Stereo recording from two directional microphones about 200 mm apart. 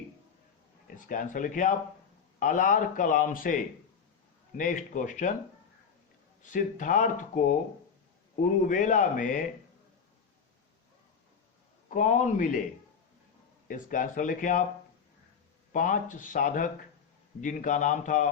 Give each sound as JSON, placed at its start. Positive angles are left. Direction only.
{"t": 0.9, "sound": "a man's voice", "side_deg": 40}
{"t": 6.4, "sound": "a man's voice", "side_deg": 40}
{"t": 11.9, "sound": "a man's voice", "side_deg": 40}
{"t": 13.7, "sound": "a man's voice", "side_deg": 40}
{"t": 15.7, "sound": "a man's voice", "side_deg": 40}